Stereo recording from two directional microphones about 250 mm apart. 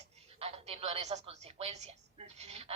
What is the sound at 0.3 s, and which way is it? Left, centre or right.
A woman's voice, right.